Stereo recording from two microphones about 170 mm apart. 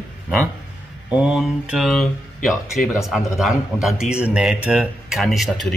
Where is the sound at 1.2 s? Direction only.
5° right (ahead or behind).